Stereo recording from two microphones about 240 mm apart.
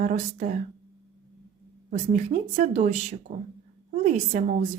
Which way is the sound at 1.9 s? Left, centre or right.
Right.